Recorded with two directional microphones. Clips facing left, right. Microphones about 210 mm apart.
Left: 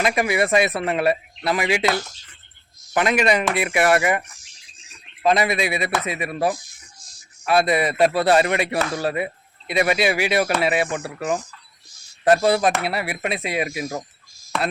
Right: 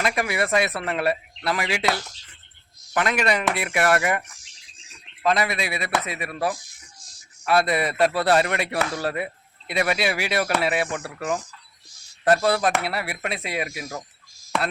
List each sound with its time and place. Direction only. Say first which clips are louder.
0.0 s speech: left 4 dB; 15° left (ahead or behind)
2.9 s speech: left 4 dB; 15° left (ahead or behind)
5.2 s speech: left 4 dB; 20° left (ahead or behind)